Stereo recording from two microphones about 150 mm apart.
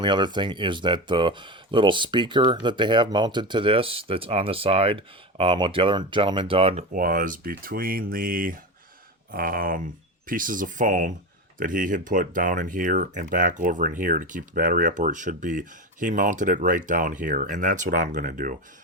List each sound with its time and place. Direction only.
0.0 s speech: 30° right (ahead or behind)
6.9 s speech: 65° right (ahead or behind)